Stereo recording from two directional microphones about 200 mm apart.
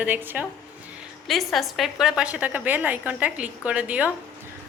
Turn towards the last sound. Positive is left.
turn(degrees=-5)  # may be behind; listen again after turning